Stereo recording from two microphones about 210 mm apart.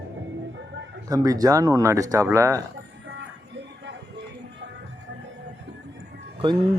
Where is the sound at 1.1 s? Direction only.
15° right (ahead or behind).